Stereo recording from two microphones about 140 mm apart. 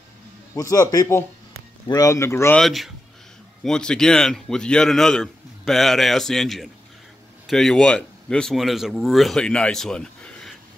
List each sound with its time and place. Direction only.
0.6 s a man's voice: 25° left (ahead or behind)
2.5 s a man's voice: centre (ahead or behind)